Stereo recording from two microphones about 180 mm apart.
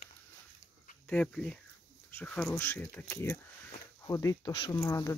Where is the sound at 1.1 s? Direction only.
5° left (ahead or behind).